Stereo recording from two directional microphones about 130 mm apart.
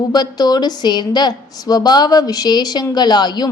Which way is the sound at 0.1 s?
35° left (ahead or behind).